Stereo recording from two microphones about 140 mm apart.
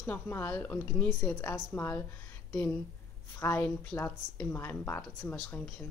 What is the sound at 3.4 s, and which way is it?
A woman's voice, 20° left (ahead or behind).